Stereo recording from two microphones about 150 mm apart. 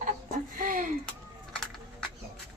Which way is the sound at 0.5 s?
65° right (ahead or behind).